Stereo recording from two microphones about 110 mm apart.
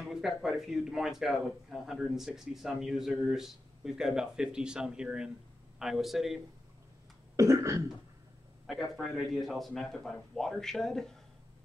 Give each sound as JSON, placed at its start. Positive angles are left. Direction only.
{"t": 0.0, "sound": "speech", "side_deg": -5}
{"t": 7.3, "sound": "cough", "side_deg": -25}
{"t": 8.9, "sound": "speech", "side_deg": 0}